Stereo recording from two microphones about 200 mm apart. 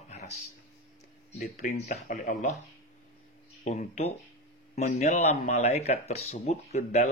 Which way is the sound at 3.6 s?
35° left (ahead or behind).